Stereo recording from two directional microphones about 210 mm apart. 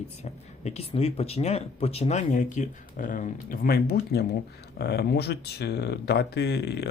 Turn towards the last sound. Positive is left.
turn(degrees=50)  # may be behind; listen again after turning